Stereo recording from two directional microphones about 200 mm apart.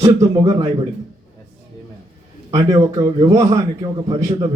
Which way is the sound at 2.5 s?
20° right (ahead or behind).